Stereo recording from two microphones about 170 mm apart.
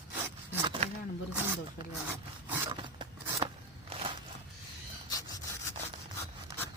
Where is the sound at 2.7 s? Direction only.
30° right (ahead or behind).